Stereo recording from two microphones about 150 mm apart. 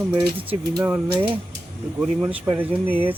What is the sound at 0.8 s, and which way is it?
Speech, 15° right (ahead or behind).